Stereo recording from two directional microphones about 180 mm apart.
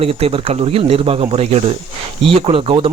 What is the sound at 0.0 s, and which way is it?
Speech, 30° right (ahead or behind).